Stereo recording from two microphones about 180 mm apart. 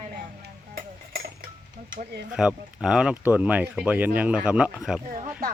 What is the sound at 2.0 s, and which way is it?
Speech, 60° right (ahead or behind).